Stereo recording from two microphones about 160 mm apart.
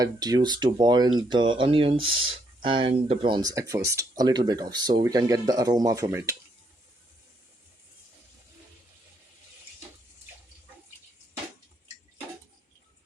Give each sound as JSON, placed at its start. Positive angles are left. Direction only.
{"t": 0.0, "sound": "speech", "side_deg": -25}